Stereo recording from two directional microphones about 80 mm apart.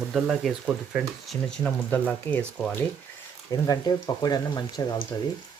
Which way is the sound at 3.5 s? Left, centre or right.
Left.